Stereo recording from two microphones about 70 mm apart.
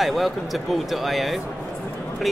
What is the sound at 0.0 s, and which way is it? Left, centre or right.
Speech, centre.